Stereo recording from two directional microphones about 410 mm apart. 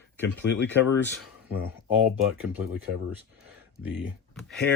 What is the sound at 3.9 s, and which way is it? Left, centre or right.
Speech, centre.